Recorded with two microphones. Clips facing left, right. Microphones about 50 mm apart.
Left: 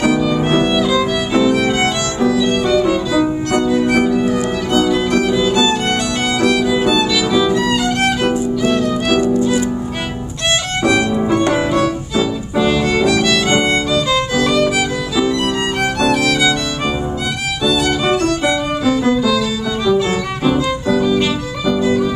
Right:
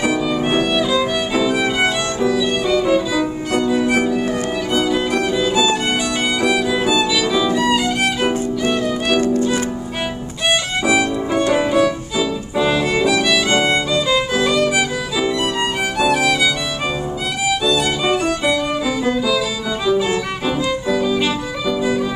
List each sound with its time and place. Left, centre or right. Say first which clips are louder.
0.0 s violin: left 3 dB; centre
4.7 s music: left 4 dB; centre
6.4 s violin: left 4 dB; centre
9.2 s music: left 2 dB; left
10.8 s music: left 4 dB; centre
16.0 s music: even; centre
17.6 s music: left 5 dB; centre
19.9 s violin: left 2 dB; centre